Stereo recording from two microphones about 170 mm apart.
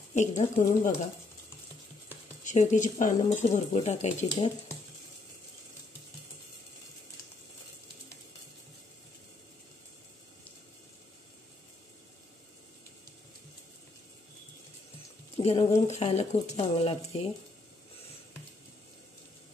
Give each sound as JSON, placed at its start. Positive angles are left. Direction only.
{"t": 0.1, "sound": "speech", "side_deg": 45}
{"t": 2.4, "sound": "speech", "side_deg": 45}
{"t": 15.3, "sound": "speech", "side_deg": 35}